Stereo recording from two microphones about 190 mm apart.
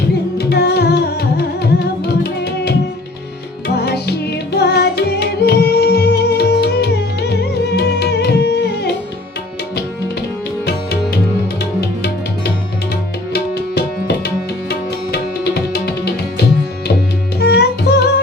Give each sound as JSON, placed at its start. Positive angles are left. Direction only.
{"t": 0.3, "sound": "music", "side_deg": 60}
{"t": 3.8, "sound": "music", "side_deg": 60}
{"t": 13.3, "sound": "tabla", "side_deg": 60}
{"t": 17.4, "sound": "music", "side_deg": 60}